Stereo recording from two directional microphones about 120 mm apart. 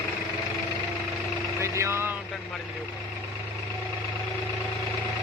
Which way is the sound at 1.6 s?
25° right (ahead or behind).